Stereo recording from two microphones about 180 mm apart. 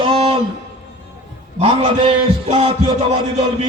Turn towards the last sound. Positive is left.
turn(degrees=-35)  # may be behind; listen again after turning